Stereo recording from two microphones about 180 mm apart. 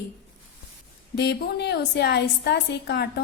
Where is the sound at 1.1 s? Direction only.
70° left (ahead or behind).